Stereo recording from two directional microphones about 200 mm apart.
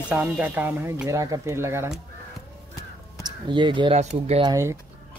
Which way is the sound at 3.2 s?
25° right (ahead or behind).